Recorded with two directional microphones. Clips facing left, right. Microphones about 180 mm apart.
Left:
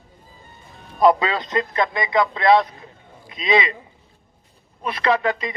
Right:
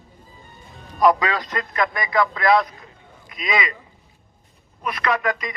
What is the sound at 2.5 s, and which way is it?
Speech, 35° left (ahead or behind).